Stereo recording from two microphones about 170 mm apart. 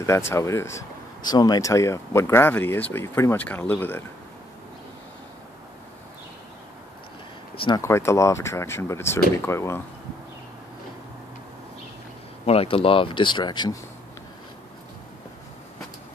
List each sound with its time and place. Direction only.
0.0 s speech: 15° left (ahead or behind)
7.5 s speech: 30° left (ahead or behind)
7.8 s speech: 15° left (ahead or behind)
12.4 s speech: 35° left (ahead or behind)